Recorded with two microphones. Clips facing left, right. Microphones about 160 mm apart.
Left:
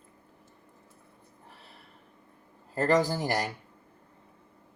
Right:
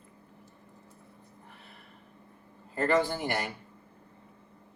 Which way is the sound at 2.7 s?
40° left (ahead or behind).